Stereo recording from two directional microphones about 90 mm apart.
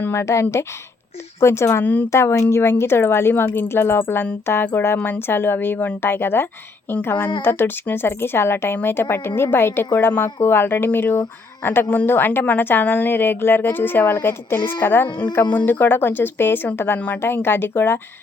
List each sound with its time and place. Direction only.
0.0 s speech: 30° left (ahead or behind)
1.8 s speech: 20° left (ahead or behind)
2.0 s a woman's voice: 30° left (ahead or behind)
4.9 s speech: 15° left (ahead or behind)
5.2 s a woman's voice: 25° left (ahead or behind)